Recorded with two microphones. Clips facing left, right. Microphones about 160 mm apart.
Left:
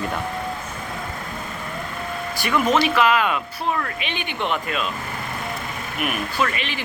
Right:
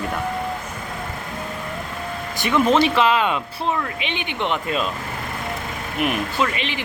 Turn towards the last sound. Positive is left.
turn(degrees=-20)  # may be behind; listen again after turning